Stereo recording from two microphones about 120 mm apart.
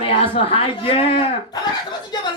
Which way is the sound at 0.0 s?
55° left (ahead or behind).